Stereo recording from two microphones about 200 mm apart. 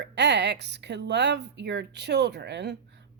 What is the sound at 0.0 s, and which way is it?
A woman's voice, 60° right (ahead or behind).